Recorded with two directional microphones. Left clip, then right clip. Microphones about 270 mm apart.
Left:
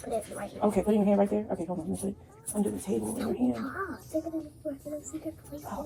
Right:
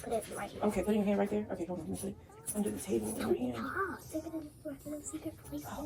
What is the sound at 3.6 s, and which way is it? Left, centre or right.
Speech, centre.